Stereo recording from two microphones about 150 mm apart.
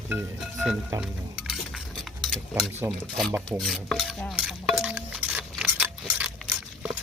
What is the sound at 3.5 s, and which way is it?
Stir, centre (ahead or behind).